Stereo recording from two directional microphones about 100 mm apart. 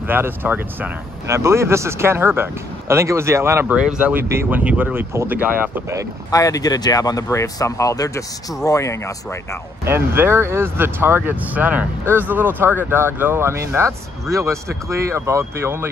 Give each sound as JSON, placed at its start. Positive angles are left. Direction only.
{"t": 0.1, "sound": "speech", "side_deg": -20}
{"t": 1.3, "sound": "speech", "side_deg": -30}
{"t": 3.7, "sound": "speech", "side_deg": -10}
{"t": 4.1, "sound": "speech", "side_deg": -25}
{"t": 6.3, "sound": "speech", "side_deg": 35}
{"t": 9.9, "sound": "speech", "side_deg": -20}